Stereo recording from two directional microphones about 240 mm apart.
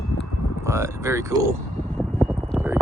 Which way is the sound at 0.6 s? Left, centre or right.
Centre.